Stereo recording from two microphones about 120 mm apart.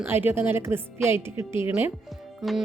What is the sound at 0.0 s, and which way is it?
Speech, 15° right (ahead or behind).